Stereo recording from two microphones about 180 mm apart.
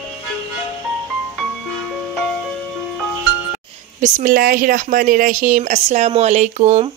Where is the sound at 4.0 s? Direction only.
50° right (ahead or behind).